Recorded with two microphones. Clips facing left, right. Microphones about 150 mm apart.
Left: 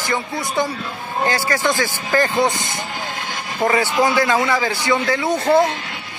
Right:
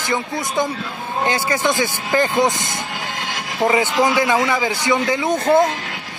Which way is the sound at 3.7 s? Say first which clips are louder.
Even; 20° right (ahead or behind).